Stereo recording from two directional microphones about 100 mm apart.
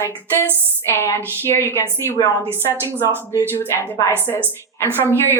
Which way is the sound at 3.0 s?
30° left (ahead or behind).